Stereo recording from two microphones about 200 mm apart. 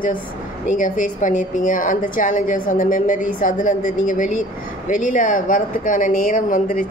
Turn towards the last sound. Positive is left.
turn(degrees=45)  # may be behind; listen again after turning